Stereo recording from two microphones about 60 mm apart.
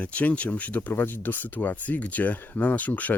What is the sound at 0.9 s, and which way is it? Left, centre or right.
Speech, left.